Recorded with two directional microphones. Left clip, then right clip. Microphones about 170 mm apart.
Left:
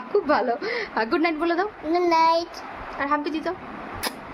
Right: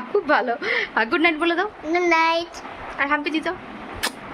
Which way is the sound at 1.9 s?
20° left (ahead or behind).